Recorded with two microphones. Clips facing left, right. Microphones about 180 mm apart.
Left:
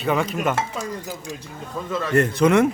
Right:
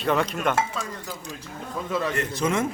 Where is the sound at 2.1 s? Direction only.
55° left (ahead or behind).